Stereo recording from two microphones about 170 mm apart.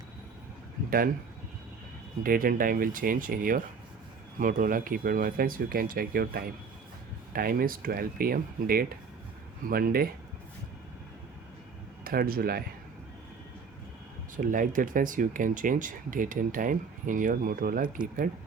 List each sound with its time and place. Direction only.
0.9 s speech: 60° right (ahead or behind)
2.2 s speech: 55° right (ahead or behind)
12.0 s speech: 60° right (ahead or behind)
14.3 s speech: 50° right (ahead or behind)